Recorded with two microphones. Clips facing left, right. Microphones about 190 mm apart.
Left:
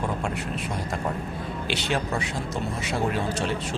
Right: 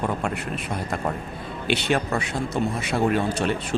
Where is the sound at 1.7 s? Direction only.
60° right (ahead or behind).